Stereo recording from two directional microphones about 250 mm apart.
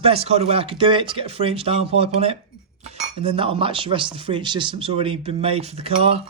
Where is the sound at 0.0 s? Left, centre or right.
Right.